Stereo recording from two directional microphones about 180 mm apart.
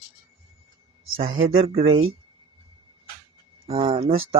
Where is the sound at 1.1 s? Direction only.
30° right (ahead or behind).